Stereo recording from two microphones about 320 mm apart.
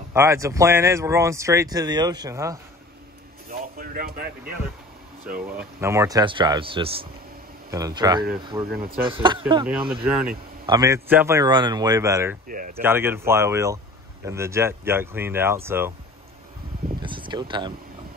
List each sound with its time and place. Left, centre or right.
0.1 s speech: centre
3.4 s a sound: right
5.6 s speech: centre
8.6 s speech: right
9.0 s speech: centre
10.0 s speech: centre
12.4 s speech: right
12.8 s speech: centre
17.0 s speech: centre